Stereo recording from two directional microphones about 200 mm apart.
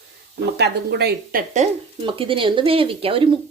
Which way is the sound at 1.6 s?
35° right (ahead or behind).